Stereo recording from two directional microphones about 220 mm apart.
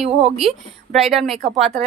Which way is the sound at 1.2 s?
35° right (ahead or behind).